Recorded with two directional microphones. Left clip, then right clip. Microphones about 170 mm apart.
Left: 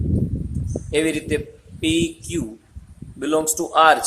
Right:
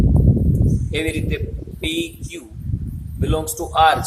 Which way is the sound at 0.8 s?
50° left (ahead or behind).